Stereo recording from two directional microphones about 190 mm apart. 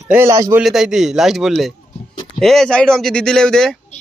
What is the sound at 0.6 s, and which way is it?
Speech, centre (ahead or behind).